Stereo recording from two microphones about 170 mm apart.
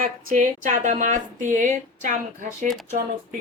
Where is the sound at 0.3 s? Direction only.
50° right (ahead or behind).